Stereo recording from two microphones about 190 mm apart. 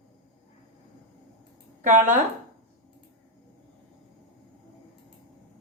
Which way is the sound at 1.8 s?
40° right (ahead or behind).